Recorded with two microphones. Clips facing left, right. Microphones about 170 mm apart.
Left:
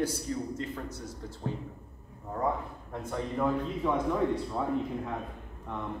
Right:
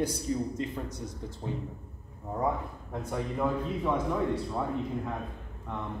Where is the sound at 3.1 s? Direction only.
5° right (ahead or behind).